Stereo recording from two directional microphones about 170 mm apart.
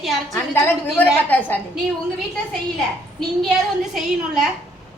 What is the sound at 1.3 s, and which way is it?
Speech, 10° left (ahead or behind).